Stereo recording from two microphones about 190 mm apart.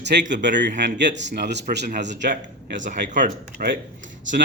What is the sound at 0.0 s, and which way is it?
Speech, 65° right (ahead or behind).